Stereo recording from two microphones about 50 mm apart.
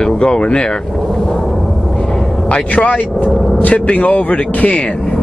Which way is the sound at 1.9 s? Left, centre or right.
Centre.